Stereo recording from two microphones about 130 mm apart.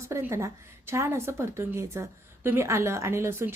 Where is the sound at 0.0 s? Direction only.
20° right (ahead or behind).